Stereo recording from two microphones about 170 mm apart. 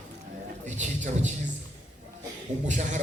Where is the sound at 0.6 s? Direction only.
45° right (ahead or behind).